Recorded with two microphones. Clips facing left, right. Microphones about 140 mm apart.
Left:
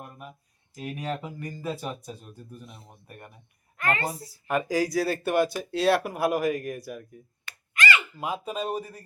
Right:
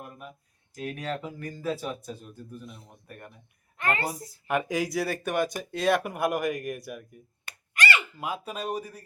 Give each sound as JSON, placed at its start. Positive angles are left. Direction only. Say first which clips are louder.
{"t": 0.0, "sound": "a sound", "louder": "even", "side_deg": 5}
{"t": 0.8, "sound": "speech", "louder": "even", "side_deg": 5}
{"t": 4.0, "sound": "speech", "louder": "left 1 dB", "side_deg": -10}
{"t": 7.4, "sound": "a sound", "louder": "left 1 dB", "side_deg": -40}
{"t": 8.2, "sound": "speech", "louder": "left 3 dB", "side_deg": -5}
{"t": 8.8, "sound": "speech", "louder": "left 1 dB", "side_deg": 5}